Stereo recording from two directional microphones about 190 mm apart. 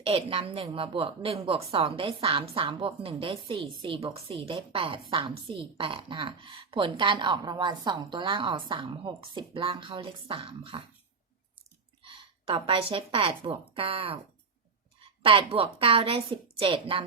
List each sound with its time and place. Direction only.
0.0 s a woman's voice: 30° right (ahead or behind)
12.0 s a woman's voice: 25° right (ahead or behind)
15.2 s a woman's voice: 30° right (ahead or behind)